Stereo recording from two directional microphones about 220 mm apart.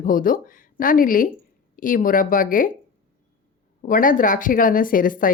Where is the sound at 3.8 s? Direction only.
40° left (ahead or behind).